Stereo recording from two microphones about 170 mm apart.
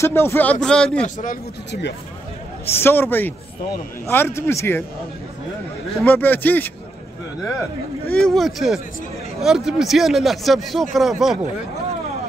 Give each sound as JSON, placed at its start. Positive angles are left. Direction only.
{"t": 0.0, "sound": "speech", "side_deg": 15}
{"t": 1.0, "sound": "a man's voice", "side_deg": 50}
{"t": 1.7, "sound": "speech", "side_deg": 90}
{"t": 2.8, "sound": "speech", "side_deg": 15}
{"t": 5.9, "sound": "speech", "side_deg": 10}
{"t": 8.1, "sound": "speech", "side_deg": 5}